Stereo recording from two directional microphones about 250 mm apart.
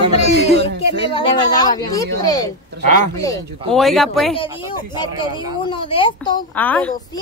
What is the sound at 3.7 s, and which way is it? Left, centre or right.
Speech, centre.